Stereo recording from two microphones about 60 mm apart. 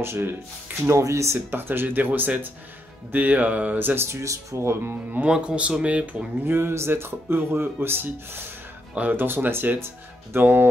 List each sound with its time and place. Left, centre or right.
0.0 s speech: right
0.8 s speech: right
1.5 s speech: right
3.1 s music: right
4.1 s speech: right
4.6 s speech: right
5.2 s music: centre
6.4 s speech: right